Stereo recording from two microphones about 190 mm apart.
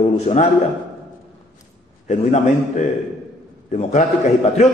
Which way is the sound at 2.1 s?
40° left (ahead or behind).